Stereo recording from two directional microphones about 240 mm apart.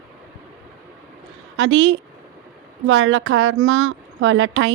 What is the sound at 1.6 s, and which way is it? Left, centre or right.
A woman's voice, right.